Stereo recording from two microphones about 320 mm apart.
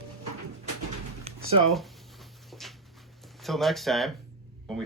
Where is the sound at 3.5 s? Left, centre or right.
Centre.